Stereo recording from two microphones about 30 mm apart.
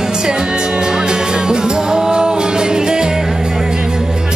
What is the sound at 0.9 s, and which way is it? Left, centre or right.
Music, right.